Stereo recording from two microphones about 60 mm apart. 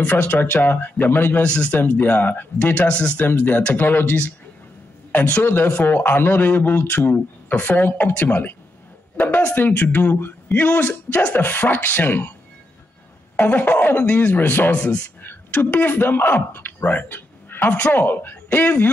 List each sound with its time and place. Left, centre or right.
0.0 s speech: left
1.4 s speech: centre
1.7 s speech: left
3.2 s speech: left
4.0 s speech: left
13.4 s speech: left
14.8 s speech: centre